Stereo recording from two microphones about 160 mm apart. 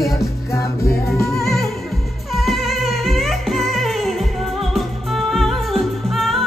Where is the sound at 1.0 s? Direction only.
Centre (ahead or behind).